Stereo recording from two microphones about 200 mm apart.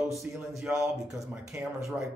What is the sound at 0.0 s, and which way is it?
Speech, centre (ahead or behind).